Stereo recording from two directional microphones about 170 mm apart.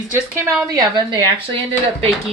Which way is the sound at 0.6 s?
25° right (ahead or behind).